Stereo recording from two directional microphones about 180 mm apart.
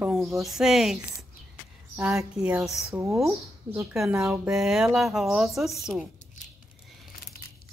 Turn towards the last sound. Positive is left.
turn(degrees=-5)  # may be behind; listen again after turning